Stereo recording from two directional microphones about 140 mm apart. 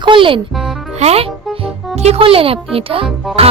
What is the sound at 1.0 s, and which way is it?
Music, 45° right (ahead or behind).